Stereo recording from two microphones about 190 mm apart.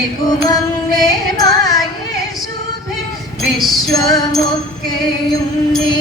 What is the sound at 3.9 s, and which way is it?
Music, 20° left (ahead or behind).